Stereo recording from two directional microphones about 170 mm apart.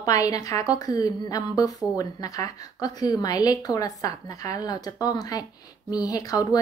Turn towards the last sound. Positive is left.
turn(degrees=20)  # may be behind; listen again after turning